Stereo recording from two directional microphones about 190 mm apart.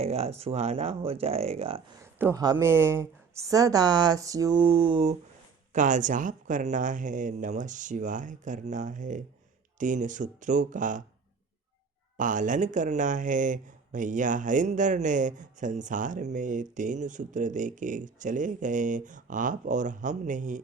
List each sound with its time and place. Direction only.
0.0 s speech: 35° right (ahead or behind)
2.0 s speech: 15° right (ahead or behind); by 5.1 s 30° right (ahead or behind)
5.7 s speech: 40° right (ahead or behind)
12.1 s speech: 45° right (ahead or behind)